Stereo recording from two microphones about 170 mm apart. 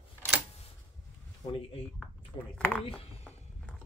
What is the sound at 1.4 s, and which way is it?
Speech, 35° left (ahead or behind).